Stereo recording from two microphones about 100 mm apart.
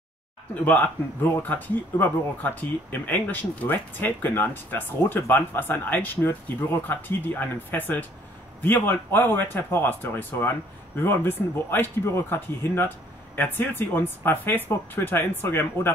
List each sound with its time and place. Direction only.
0.7 s speech: 20° left (ahead or behind)